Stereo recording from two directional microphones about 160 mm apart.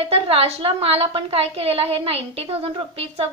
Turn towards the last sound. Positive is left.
turn(degrees=-40)  # may be behind; listen again after turning